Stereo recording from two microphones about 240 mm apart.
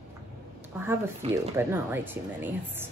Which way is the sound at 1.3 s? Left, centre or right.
Centre.